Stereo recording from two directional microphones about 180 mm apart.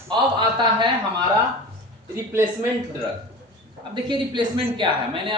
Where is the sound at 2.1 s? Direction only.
15° right (ahead or behind).